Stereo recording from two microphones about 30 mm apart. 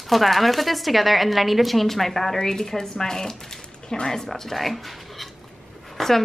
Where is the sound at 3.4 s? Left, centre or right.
Left.